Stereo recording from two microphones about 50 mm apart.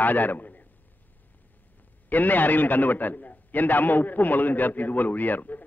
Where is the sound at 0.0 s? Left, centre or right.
Left.